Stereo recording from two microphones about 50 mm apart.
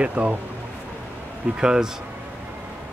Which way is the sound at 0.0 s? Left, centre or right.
Right.